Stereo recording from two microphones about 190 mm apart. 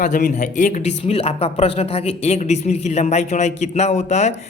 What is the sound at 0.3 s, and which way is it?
A woman's voice, 40° left (ahead or behind).